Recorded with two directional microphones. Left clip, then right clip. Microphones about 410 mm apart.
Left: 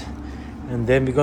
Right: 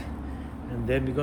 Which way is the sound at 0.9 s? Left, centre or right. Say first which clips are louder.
Left 9 dB; centre.